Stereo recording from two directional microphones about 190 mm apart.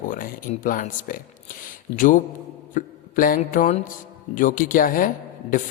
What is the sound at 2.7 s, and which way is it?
Mantra, 45° left (ahead or behind).